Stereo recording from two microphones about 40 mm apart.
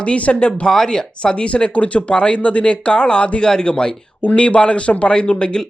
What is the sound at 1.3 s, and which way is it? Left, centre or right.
Speech, left.